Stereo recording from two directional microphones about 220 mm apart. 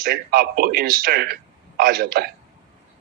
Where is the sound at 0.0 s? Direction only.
45° right (ahead or behind).